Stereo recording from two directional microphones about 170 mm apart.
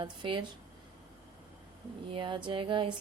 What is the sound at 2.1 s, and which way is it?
Speech, 30° right (ahead or behind).